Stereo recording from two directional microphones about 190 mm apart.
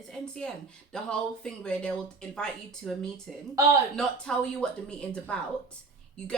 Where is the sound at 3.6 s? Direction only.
15° right (ahead or behind).